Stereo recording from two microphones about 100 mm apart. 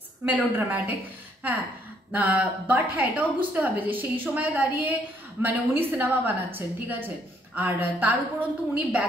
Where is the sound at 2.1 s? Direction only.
15° right (ahead or behind).